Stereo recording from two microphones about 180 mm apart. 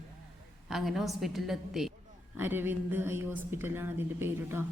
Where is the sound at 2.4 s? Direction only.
10° right (ahead or behind).